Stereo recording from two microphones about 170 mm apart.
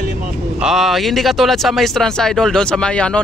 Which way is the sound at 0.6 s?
5° right (ahead or behind).